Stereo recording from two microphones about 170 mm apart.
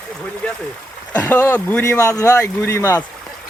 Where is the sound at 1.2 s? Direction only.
10° left (ahead or behind).